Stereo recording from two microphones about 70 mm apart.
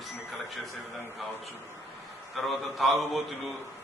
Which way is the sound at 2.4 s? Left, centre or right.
Centre.